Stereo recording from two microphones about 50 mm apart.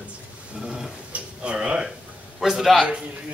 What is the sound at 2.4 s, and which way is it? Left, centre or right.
Speech, centre.